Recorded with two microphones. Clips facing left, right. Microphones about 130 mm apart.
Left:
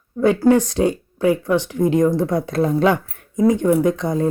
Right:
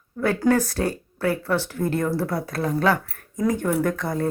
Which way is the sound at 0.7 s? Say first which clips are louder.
Left 7 dB; 20° left (ahead or behind).